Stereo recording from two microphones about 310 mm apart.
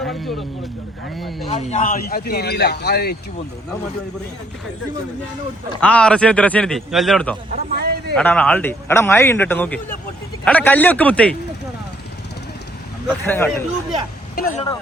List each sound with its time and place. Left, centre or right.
0.0 s a man's voice: centre
1.5 s speech: left
5.8 s a man's voice: centre
7.5 s a man's voice: right
8.1 s a man's voice: centre
13.2 s speech: centre
14.3 s speech: left